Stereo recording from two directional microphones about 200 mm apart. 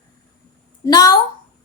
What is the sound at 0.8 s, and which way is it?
Speech, 20° left (ahead or behind).